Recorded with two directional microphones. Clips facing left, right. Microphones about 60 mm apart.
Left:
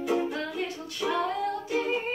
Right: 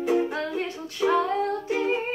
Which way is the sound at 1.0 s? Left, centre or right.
Right.